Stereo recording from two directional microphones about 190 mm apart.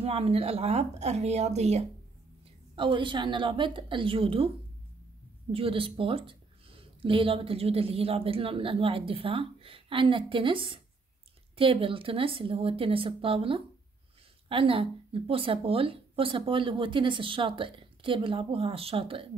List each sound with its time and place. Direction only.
0.0 s a woman's voice: 30° right (ahead or behind)
5.5 s speech: 30° right (ahead or behind)